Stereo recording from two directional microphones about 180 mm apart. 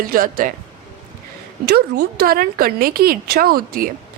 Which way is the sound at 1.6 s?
60° right (ahead or behind).